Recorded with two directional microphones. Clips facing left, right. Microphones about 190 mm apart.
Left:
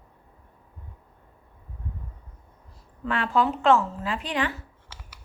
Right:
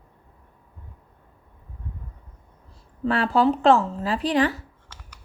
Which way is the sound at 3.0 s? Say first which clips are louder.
Right 4 dB; 35° right (ahead or behind).